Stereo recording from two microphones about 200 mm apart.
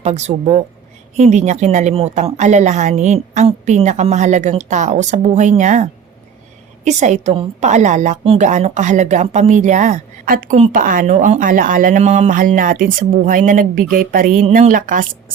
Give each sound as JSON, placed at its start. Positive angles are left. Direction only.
{"t": 0.0, "sound": "a woman's voice", "side_deg": -35}